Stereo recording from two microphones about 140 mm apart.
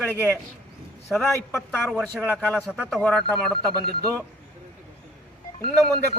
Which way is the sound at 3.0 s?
5° left (ahead or behind).